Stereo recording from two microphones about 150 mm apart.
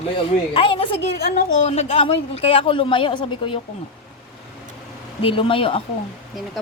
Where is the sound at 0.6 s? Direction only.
35° left (ahead or behind).